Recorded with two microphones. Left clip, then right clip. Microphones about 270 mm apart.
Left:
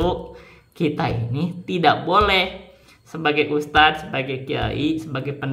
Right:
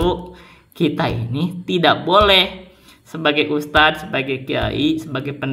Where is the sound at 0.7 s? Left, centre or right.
Centre.